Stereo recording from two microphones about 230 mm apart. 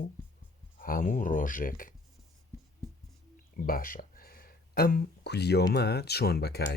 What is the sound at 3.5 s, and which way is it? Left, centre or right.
Speech, left.